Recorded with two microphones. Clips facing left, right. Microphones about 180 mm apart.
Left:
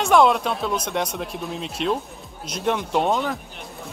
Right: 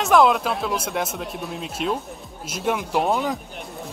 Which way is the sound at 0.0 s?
Centre (ahead or behind).